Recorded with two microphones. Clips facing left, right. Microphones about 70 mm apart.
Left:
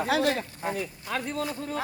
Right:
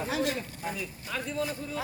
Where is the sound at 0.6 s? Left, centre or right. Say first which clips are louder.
Left 4 dB; left.